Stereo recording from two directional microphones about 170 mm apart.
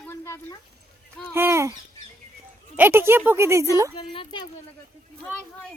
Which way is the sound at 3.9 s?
30° left (ahead or behind).